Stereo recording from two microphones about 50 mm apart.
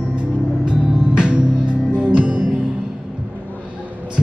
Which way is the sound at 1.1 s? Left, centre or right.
Right.